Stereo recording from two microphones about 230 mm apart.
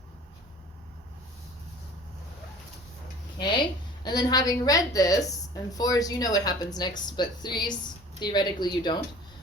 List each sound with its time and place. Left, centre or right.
3.3 s a woman's voice: centre